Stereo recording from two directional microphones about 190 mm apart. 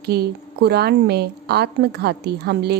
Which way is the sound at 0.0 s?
55° right (ahead or behind).